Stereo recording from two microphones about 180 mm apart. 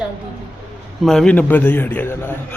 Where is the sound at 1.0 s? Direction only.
5° left (ahead or behind).